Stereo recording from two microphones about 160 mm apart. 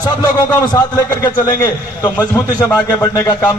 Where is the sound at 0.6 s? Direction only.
20° left (ahead or behind).